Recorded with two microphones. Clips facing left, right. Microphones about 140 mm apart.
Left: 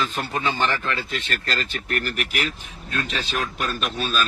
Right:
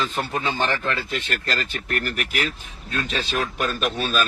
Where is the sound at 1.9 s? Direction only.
40° right (ahead or behind).